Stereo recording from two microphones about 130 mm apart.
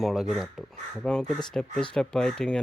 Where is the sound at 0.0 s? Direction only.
Centre (ahead or behind).